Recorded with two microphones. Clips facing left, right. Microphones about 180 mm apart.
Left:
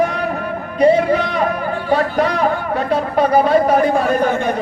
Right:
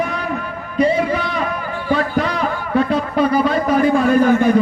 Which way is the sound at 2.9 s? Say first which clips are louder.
Left 7 dB; 50° left (ahead or behind).